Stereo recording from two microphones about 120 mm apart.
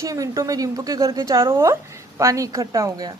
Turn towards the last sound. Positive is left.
turn(degrees=-30)  # may be behind; listen again after turning